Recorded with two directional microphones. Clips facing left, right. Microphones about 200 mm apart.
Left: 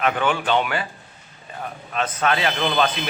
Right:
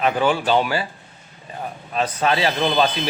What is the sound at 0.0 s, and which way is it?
Speech, 30° right (ahead or behind).